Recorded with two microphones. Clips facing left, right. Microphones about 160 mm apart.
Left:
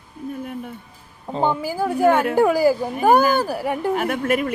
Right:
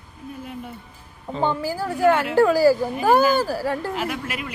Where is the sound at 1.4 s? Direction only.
15° left (ahead or behind).